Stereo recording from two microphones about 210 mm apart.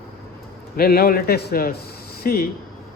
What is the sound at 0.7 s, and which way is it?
Speech, 45° left (ahead or behind).